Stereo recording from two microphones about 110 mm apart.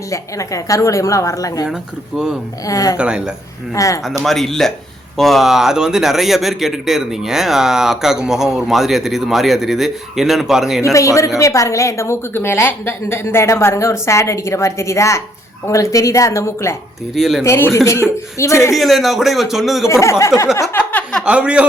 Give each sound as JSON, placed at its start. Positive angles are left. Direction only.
{"t": 0.1, "sound": "a woman's voice", "side_deg": 30}
{"t": 1.6, "sound": "speech", "side_deg": -5}
{"t": 2.6, "sound": "a woman's voice", "side_deg": 30}
{"t": 3.0, "sound": "speech", "side_deg": -10}
{"t": 3.8, "sound": "a woman's voice", "side_deg": 30}
{"t": 4.2, "sound": "a man's voice", "side_deg": 0}
{"t": 10.8, "sound": "a woman's voice", "side_deg": 30}
{"t": 17.2, "sound": "a man's voice", "side_deg": 0}
{"t": 17.4, "sound": "a woman's voice", "side_deg": 25}
{"t": 18.8, "sound": "a man's voice", "side_deg": 0}
{"t": 19.9, "sound": "a woman's voice", "side_deg": 25}
{"t": 20.6, "sound": "a sound", "side_deg": 20}
{"t": 21.2, "sound": "speech", "side_deg": -10}